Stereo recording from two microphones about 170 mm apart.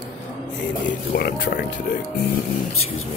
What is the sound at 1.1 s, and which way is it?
Speech, 70° left (ahead or behind).